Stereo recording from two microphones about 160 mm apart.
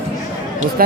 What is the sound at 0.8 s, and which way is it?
Speech, 65° right (ahead or behind).